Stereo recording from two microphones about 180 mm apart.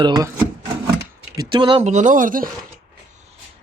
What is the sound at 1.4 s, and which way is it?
Speech, 25° right (ahead or behind).